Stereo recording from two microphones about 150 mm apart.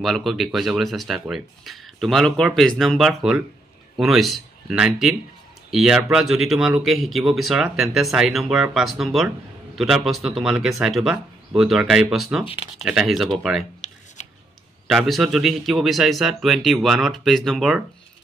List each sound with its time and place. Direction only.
0.0 s speech: centre (ahead or behind)
14.9 s speech: centre (ahead or behind)